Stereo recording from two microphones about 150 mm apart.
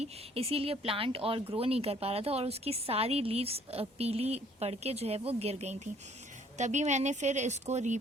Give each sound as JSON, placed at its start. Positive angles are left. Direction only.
{"t": 0.0, "sound": "speech", "side_deg": -40}